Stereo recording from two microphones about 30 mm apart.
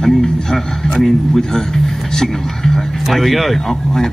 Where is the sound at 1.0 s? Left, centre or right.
Centre.